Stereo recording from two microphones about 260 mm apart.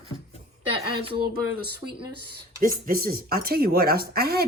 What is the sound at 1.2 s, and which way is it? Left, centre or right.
Speech, right.